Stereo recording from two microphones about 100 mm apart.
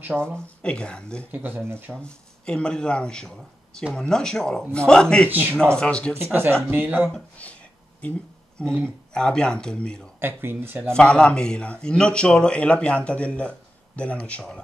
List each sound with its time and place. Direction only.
0.0 s speech: 20° right (ahead or behind)
0.6 s a man's voice: 10° left (ahead or behind)
1.3 s speech: 20° right (ahead or behind)
2.0 s a man's voice: 10° left (ahead or behind)
5.3 s speech: 20° right (ahead or behind)
5.8 s a man's voice: 10° left (ahead or behind)
6.1 s speech: 20° right (ahead or behind)
8.6 s a man's voice: 10° left (ahead or behind)
10.2 s speech: 20° right (ahead or behind)
10.9 s a man's voice: 10° left (ahead or behind)